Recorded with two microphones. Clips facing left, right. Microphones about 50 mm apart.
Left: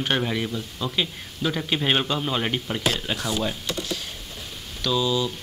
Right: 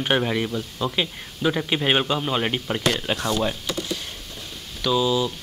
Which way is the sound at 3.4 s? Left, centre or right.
Centre.